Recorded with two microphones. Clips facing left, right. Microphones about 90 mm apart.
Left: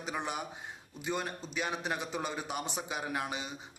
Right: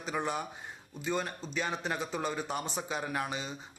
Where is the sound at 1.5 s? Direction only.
15° left (ahead or behind).